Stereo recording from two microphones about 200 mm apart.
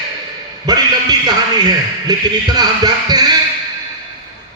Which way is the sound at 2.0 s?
20° right (ahead or behind).